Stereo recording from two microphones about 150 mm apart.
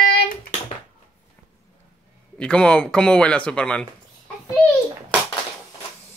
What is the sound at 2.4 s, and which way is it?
Speech, 5° left (ahead or behind).